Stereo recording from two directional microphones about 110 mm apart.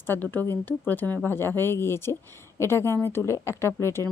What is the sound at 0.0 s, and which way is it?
Speech, 20° left (ahead or behind).